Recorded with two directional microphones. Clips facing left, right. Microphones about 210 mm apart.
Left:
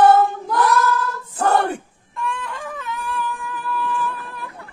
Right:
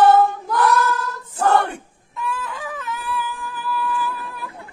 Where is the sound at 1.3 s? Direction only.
35° left (ahead or behind).